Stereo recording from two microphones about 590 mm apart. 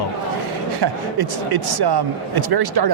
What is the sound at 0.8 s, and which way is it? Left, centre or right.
Speech, right.